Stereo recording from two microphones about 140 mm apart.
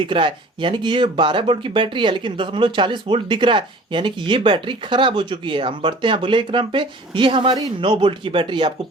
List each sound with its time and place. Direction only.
0.0 s speech: 35° right (ahead or behind)